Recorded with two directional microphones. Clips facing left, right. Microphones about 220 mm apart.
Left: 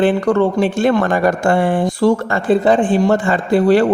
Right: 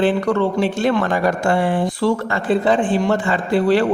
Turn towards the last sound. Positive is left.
turn(degrees=45)  # may be behind; listen again after turning